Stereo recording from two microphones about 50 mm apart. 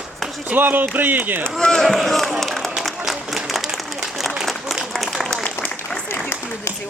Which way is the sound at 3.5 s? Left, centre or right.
Centre.